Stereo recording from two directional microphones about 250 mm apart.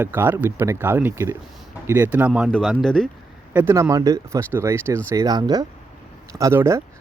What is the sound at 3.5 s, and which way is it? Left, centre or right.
A man's voice, centre.